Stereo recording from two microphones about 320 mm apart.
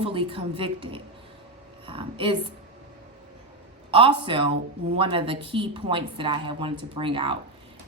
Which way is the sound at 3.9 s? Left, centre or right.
Centre.